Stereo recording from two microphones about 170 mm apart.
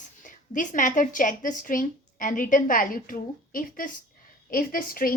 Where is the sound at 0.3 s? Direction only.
50° left (ahead or behind).